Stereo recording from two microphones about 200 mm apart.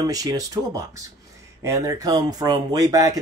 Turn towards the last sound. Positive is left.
turn(degrees=-15)  # may be behind; listen again after turning